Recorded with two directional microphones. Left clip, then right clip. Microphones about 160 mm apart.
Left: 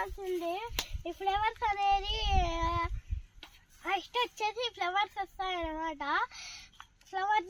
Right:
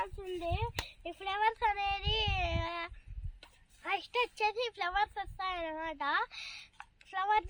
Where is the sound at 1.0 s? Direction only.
20° right (ahead or behind).